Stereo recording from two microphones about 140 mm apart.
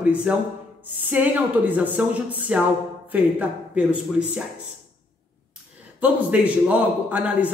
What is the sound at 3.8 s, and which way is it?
Speech, 10° right (ahead or behind).